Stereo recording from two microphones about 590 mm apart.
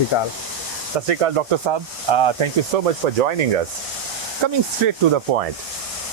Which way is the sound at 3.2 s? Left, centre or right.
Right.